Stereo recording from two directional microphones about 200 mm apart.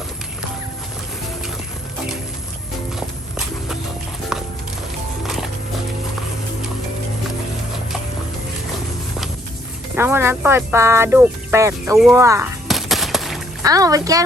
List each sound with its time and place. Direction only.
4.3 s music: centre (ahead or behind)
9.9 s speech: 10° right (ahead or behind)
12.6 s a sound: centre (ahead or behind)
13.6 s speech: 15° right (ahead or behind)